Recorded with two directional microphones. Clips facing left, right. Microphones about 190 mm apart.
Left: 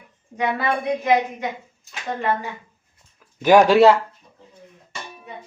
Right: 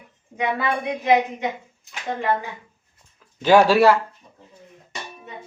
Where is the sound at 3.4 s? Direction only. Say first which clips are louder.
Left 2 dB; 15° left (ahead or behind).